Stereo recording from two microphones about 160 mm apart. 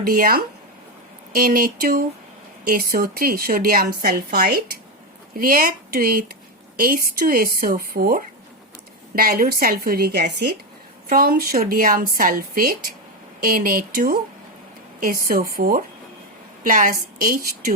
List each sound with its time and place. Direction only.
0.0 s a woman's voice: 60° right (ahead or behind); by 10.3 s 90° right
11.1 s a woman's voice: 65° right (ahead or behind)